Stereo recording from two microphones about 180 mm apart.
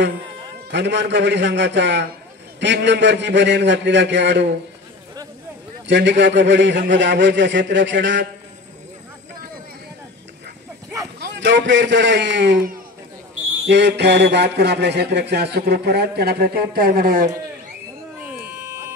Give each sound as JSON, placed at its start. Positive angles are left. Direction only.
{"t": 0.7, "sound": "a man's voice", "side_deg": -75}
{"t": 5.9, "sound": "a man's voice", "side_deg": -80}
{"t": 11.1, "sound": "a man's voice", "side_deg": -80}
{"t": 18.2, "sound": "buzzer", "side_deg": -15}